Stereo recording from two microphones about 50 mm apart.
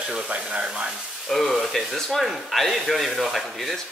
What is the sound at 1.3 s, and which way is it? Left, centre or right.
Speech, centre.